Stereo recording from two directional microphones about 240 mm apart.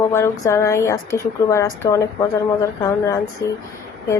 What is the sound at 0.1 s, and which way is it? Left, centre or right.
A woman's voice, centre.